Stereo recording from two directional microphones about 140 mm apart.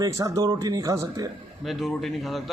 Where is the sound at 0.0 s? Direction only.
20° right (ahead or behind).